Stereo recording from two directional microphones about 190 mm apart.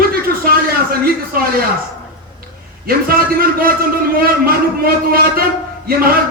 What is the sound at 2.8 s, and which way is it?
A man's voice, 50° right (ahead or behind).